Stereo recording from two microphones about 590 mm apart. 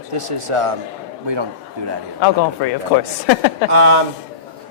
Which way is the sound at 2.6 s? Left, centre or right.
Left.